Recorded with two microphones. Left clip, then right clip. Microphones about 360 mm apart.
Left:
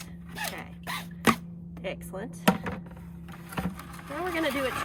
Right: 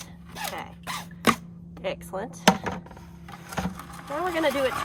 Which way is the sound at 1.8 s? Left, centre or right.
Centre.